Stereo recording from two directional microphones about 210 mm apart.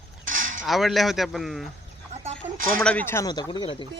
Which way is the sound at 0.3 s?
40° right (ahead or behind).